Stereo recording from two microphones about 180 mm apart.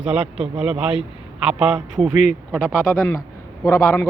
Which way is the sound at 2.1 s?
40° left (ahead or behind).